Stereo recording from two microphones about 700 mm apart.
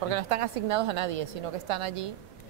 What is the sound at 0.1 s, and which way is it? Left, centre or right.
A woman's voice, right.